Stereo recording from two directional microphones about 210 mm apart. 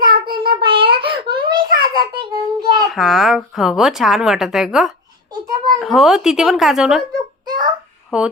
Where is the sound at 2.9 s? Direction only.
Centre (ahead or behind).